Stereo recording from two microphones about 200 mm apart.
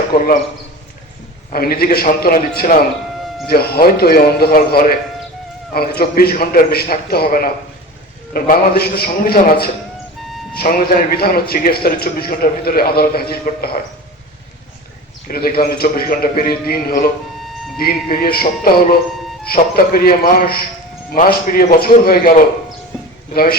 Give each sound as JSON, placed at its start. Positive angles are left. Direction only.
{"t": 1.5, "sound": "a man's voice", "side_deg": 50}
{"t": 15.3, "sound": "a man's voice", "side_deg": 50}